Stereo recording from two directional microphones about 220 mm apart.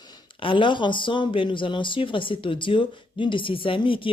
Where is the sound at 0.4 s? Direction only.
20° left (ahead or behind).